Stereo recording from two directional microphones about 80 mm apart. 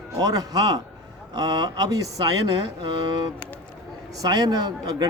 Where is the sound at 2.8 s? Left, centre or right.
Right.